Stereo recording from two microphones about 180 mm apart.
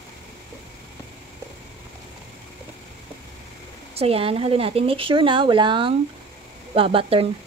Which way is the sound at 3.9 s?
35° right (ahead or behind).